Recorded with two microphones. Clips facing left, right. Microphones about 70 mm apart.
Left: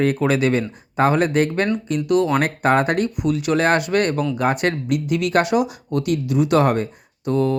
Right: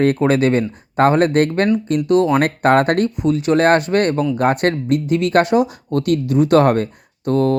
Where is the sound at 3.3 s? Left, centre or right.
Right.